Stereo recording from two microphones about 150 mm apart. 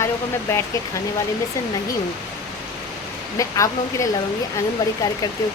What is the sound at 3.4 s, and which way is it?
Speech, 20° left (ahead or behind).